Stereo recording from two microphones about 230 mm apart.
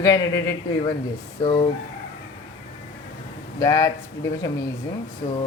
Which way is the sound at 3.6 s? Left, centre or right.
Centre.